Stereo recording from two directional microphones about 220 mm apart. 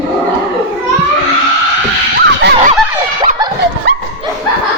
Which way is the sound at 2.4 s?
50° right (ahead or behind).